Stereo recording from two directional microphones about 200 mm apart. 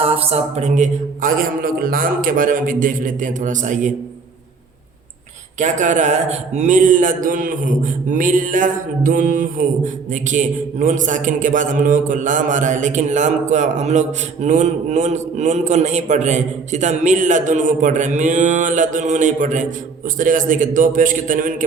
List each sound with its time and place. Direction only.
0.0 s a man's voice: 30° right (ahead or behind)
5.5 s a man's voice: 40° right (ahead or behind)